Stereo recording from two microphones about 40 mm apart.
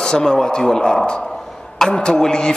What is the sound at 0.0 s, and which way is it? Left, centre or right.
A man's voice, centre.